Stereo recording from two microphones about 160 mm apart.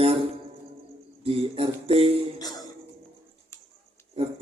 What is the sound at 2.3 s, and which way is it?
Music, 25° left (ahead or behind).